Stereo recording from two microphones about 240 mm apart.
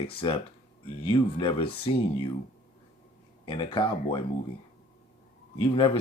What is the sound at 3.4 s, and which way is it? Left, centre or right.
Speech, centre.